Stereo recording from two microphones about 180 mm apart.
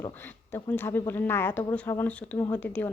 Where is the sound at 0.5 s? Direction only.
10° left (ahead or behind).